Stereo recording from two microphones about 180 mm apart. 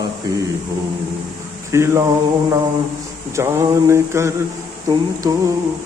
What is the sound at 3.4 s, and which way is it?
Speech, 15° right (ahead or behind).